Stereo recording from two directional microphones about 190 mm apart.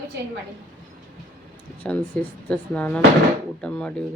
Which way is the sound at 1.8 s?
5° left (ahead or behind).